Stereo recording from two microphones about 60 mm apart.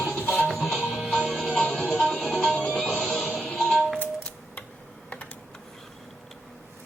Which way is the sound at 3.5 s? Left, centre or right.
Centre.